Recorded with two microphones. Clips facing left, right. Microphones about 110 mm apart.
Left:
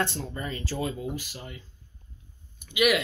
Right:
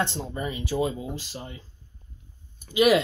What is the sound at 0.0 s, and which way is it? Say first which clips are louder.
Speech: right 2 dB; 20° right (ahead or behind).